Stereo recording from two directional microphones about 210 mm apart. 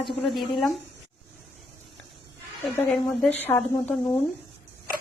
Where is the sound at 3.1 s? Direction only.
10° left (ahead or behind).